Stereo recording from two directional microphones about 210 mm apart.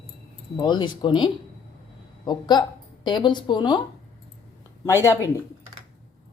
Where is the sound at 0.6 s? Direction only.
20° left (ahead or behind).